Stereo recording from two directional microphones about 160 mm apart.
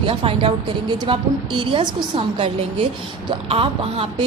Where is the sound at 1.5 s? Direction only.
30° right (ahead or behind).